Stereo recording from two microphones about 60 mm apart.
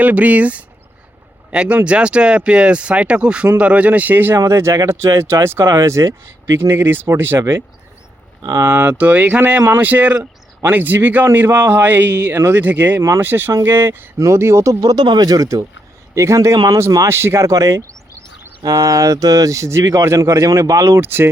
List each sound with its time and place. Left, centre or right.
0.0 s speech: right
4.4 s speech: right
5.7 s speech: right
6.5 s speech: right
8.6 s speech: right
9.6 s speech: right
9.8 s speech: right
13.0 s speech: right
13.2 s speech: right
14.2 s speech: right
16.1 s speech: right
17.1 s speech: right
17.5 s speech: right
21.0 s speech: right